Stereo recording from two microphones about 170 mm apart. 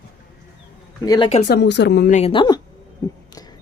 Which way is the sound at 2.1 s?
45° left (ahead or behind).